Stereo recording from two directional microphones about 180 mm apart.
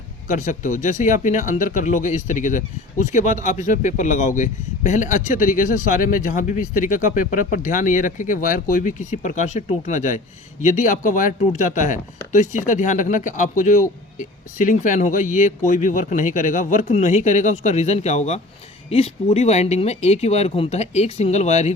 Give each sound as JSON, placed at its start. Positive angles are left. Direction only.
{"t": 0.3, "sound": "speech", "side_deg": 45}